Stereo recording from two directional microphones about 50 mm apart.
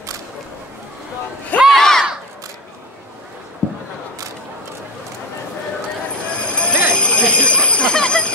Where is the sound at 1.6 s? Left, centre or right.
Centre.